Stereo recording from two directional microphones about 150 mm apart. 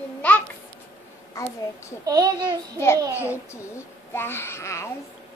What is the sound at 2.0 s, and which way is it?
Speech, 25° right (ahead or behind).